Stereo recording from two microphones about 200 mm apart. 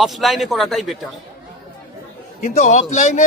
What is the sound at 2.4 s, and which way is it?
Speech, 35° left (ahead or behind).